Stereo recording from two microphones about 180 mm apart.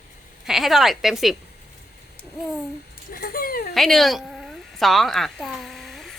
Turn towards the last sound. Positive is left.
turn(degrees=0)  # may be behind; listen again after turning